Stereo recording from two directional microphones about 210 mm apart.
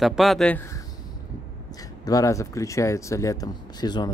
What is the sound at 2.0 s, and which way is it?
Speech, 15° left (ahead or behind).